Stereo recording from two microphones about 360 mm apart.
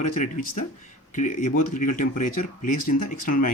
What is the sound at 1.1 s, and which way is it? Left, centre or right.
Speech, left.